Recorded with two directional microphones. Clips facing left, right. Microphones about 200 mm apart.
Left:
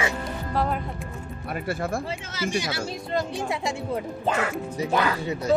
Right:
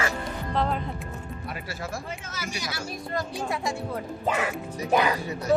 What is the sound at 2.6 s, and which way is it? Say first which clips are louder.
Speech: left 4 dB; 25° left (ahead or behind).